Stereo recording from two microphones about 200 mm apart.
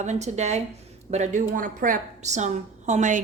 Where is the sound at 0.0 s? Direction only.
35° right (ahead or behind).